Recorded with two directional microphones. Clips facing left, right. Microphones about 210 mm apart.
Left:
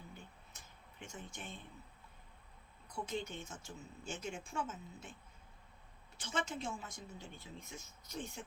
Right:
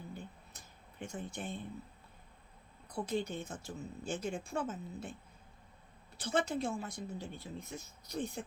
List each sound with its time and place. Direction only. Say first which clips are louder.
0.5 s a sound: right 3 dB; 35° right (ahead or behind)
2.8 s speech: right 5 dB; 35° right (ahead or behind)
6.1 s speech: right 7 dB; 35° right (ahead or behind)